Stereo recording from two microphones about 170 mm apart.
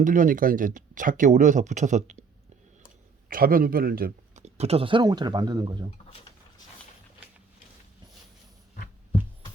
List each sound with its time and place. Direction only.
0.0 s speech: 50° right (ahead or behind)
3.2 s a man's voice: 55° right (ahead or behind)
4.4 s speech: 40° right (ahead or behind); by 5.9 s 25° right (ahead or behind)